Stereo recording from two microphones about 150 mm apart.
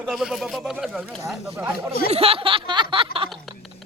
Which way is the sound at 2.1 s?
40° right (ahead or behind).